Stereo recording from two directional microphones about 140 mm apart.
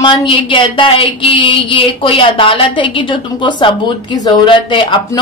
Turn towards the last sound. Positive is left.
turn(degrees=35)  # may be behind; listen again after turning